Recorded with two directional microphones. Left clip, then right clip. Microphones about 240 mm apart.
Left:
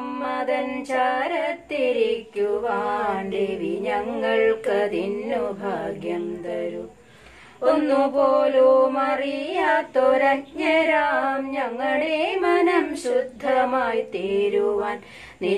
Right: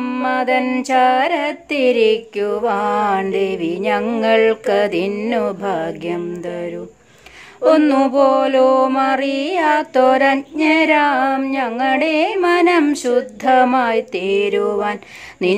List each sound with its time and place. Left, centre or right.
0.0 s mantra: right
7.7 s mantra: right